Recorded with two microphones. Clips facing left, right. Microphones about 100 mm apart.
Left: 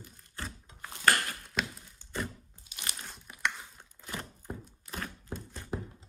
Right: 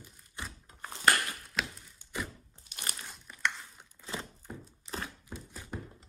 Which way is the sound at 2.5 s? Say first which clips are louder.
Right 1 dB; 50° right (ahead or behind).